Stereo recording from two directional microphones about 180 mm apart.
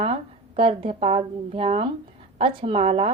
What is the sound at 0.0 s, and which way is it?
A woman's voice, 30° right (ahead or behind).